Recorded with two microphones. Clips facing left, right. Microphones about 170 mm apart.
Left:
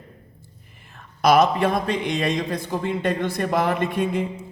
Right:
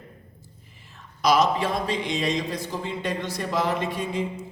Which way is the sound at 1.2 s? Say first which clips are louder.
Left 4 dB; 55° left (ahead or behind).